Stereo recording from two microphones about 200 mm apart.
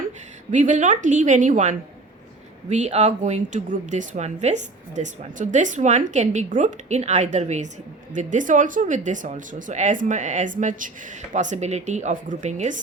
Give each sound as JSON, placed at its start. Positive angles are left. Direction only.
{"t": 0.5, "sound": "speech", "side_deg": -40}